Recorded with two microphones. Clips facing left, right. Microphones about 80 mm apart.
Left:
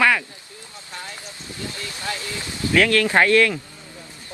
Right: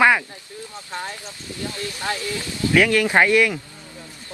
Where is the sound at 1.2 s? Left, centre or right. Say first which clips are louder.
Right 2 dB; left.